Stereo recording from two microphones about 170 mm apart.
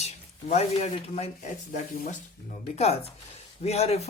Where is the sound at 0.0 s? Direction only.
40° left (ahead or behind).